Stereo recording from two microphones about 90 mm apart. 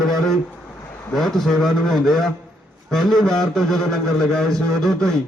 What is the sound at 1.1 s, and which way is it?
A man's voice, 5° left (ahead or behind).